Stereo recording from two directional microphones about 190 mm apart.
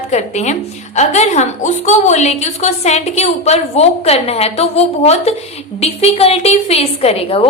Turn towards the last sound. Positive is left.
turn(degrees=30)  # may be behind; listen again after turning